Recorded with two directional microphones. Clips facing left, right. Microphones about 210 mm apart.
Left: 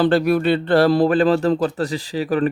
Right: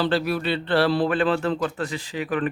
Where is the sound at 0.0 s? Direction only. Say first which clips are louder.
Left 7 dB; 50° left (ahead or behind).